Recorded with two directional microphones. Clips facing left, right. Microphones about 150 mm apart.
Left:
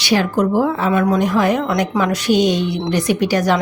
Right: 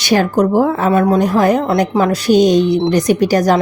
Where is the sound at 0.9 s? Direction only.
35° right (ahead or behind).